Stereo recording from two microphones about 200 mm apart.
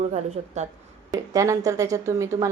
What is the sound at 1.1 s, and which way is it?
Speech, 15° right (ahead or behind).